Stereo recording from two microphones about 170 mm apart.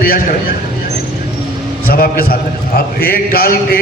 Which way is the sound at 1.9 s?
60° left (ahead or behind).